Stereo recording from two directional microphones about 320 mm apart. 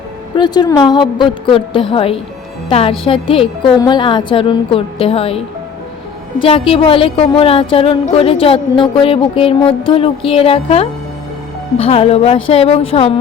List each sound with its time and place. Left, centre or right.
0.3 s a woman's voice: centre
6.4 s a woman's voice: centre